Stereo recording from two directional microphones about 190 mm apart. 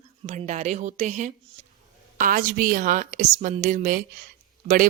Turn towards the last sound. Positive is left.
turn(degrees=-45)  # may be behind; listen again after turning